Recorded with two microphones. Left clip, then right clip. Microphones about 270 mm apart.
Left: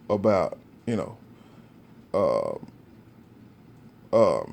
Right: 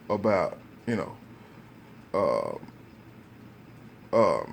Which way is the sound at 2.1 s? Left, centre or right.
Left.